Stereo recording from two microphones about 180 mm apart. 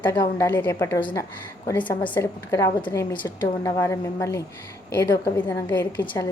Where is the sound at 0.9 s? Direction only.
25° left (ahead or behind).